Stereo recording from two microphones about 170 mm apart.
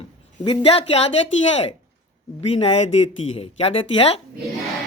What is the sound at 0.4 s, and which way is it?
Speech, 35° left (ahead or behind).